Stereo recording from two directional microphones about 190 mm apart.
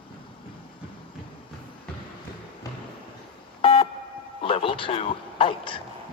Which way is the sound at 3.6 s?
30° left (ahead or behind).